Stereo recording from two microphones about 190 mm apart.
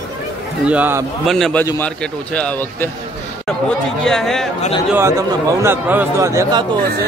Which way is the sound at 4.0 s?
Centre (ahead or behind).